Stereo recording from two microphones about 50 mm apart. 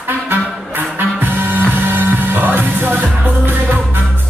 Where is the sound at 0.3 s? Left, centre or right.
Right.